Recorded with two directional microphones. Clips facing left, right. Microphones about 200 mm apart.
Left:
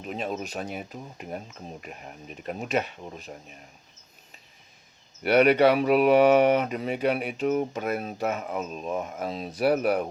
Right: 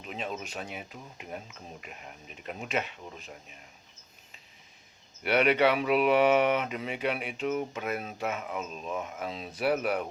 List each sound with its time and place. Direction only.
0.0 s speech: 40° left (ahead or behind)
5.2 s speech: 40° left (ahead or behind)